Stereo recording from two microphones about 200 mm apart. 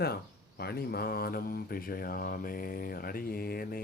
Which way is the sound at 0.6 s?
50° left (ahead or behind).